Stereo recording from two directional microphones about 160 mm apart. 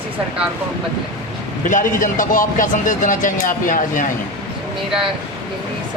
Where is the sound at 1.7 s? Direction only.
55° left (ahead or behind).